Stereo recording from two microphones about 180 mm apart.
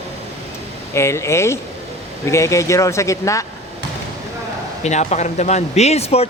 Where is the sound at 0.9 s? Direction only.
15° left (ahead or behind).